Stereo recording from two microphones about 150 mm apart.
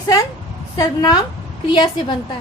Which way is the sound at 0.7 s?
25° left (ahead or behind).